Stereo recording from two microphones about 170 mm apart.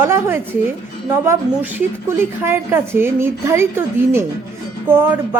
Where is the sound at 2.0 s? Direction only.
15° right (ahead or behind).